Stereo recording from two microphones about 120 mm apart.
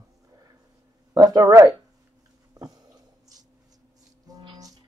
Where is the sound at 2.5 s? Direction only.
30° right (ahead or behind).